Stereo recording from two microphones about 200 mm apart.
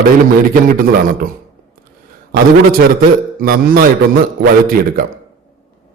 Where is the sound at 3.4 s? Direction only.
45° right (ahead or behind).